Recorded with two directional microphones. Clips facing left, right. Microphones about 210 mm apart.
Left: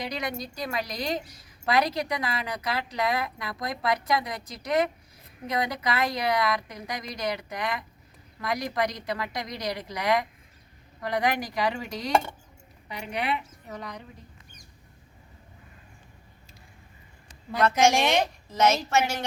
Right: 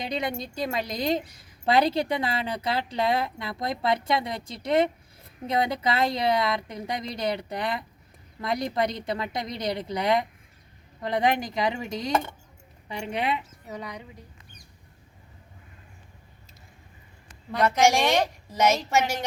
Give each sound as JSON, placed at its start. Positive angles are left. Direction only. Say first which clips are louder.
{"t": 0.0, "sound": "a woman's voice", "louder": "right 2 dB", "side_deg": -25}
{"t": 13.7, "sound": "a woman's voice", "louder": "right 2 dB", "side_deg": -10}
{"t": 17.6, "sound": "a woman's voice", "louder": "right 1 dB", "side_deg": -15}